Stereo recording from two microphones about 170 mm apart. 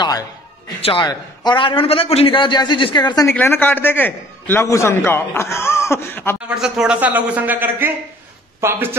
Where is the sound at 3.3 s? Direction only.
10° left (ahead or behind).